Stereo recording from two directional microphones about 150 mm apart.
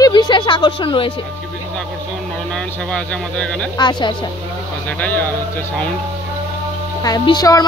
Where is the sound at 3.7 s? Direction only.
30° left (ahead or behind).